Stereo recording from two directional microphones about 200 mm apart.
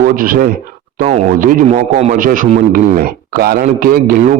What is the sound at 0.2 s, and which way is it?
Speech, 45° right (ahead or behind).